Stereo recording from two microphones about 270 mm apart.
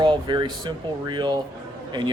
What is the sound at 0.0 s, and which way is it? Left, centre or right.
Speech, centre.